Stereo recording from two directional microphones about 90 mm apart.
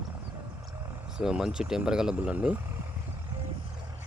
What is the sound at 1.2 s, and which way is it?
Speech, 5° right (ahead or behind).